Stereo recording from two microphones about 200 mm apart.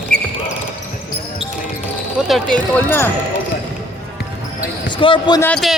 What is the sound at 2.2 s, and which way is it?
Speech, centre (ahead or behind).